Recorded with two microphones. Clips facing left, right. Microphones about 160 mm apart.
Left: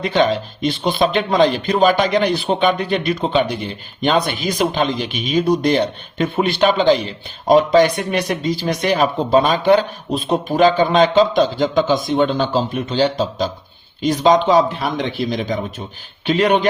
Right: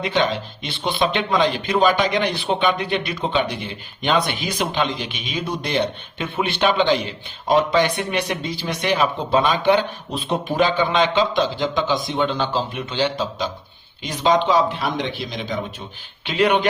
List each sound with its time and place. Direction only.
0.0 s speech: 40° left (ahead or behind)